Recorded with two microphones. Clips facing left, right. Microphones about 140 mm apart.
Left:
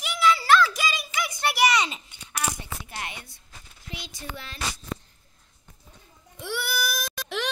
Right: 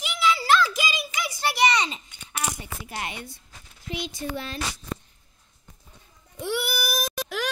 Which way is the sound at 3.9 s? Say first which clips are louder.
Right 8 dB; 20° right (ahead or behind).